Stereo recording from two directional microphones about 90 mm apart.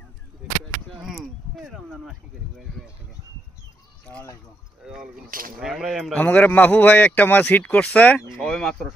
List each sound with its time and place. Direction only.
1.0 s a sound: 5° right (ahead or behind)
4.8 s speech: 5° right (ahead or behind)
6.1 s speech: 15° left (ahead or behind)